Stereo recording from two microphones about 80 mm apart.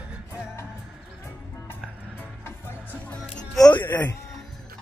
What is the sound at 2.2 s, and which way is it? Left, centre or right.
Music, left.